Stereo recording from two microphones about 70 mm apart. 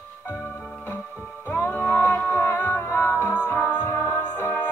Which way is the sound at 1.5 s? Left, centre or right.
Left.